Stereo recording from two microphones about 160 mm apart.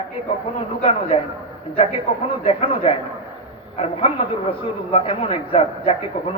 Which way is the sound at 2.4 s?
35° left (ahead or behind).